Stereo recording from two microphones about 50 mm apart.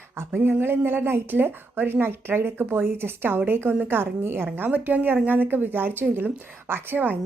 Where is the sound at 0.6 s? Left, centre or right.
Right.